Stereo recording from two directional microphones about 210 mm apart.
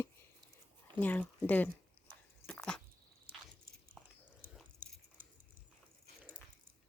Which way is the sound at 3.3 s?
45° right (ahead or behind).